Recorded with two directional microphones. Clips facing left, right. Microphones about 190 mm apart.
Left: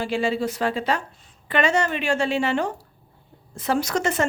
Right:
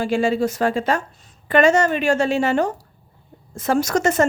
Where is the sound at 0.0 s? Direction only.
45° right (ahead or behind).